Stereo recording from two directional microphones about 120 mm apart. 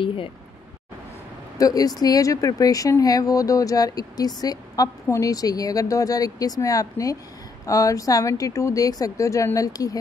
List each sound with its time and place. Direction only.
0.0 s speech: 45° left (ahead or behind)
1.6 s speech: 30° left (ahead or behind)